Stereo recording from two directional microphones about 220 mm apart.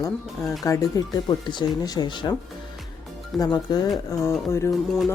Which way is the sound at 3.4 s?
15° left (ahead or behind).